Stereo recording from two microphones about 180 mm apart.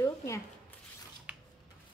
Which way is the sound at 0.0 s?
15° left (ahead or behind).